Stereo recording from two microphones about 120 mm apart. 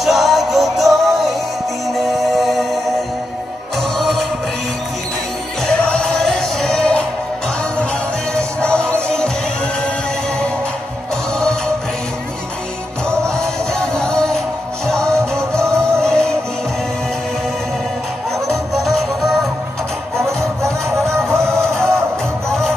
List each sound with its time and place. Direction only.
0.0 s music: centre (ahead or behind)
4.0 s music: centre (ahead or behind)
5.7 s music: 5° left (ahead or behind)
8.4 s music: 10° left (ahead or behind)
11.3 s music: 5° left (ahead or behind)
13.4 s music: 5° left (ahead or behind)
15.5 s music: 5° left (ahead or behind)
18.7 s music: centre (ahead or behind)
21.3 s music: 20° right (ahead or behind)